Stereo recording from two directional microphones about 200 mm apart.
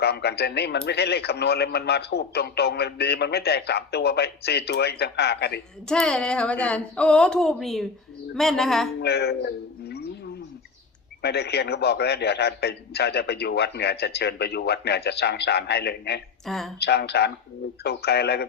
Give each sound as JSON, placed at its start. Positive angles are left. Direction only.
{"t": 0.0, "sound": "speech", "side_deg": 55}
{"t": 5.9, "sound": "speech", "side_deg": 5}
{"t": 9.0, "sound": "speech", "side_deg": 55}
{"t": 11.2, "sound": "speech", "side_deg": 55}
{"t": 16.5, "sound": "speech", "side_deg": 0}
{"t": 16.8, "sound": "speech", "side_deg": 55}